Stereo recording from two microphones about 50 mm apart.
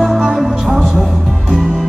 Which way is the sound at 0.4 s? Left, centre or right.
Centre.